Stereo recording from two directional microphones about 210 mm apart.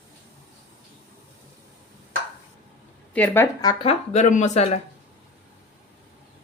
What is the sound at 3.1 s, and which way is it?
Speech, 10° left (ahead or behind).